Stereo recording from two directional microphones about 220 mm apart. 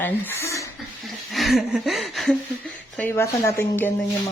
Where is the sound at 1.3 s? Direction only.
Centre (ahead or behind).